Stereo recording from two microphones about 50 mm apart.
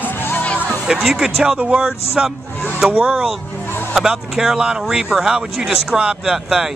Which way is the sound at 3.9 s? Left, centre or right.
Centre.